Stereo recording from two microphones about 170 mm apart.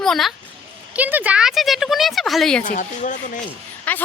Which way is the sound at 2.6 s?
45° left (ahead or behind).